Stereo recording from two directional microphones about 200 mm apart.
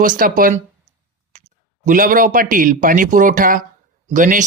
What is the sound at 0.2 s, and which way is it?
A man's voice, 45° right (ahead or behind).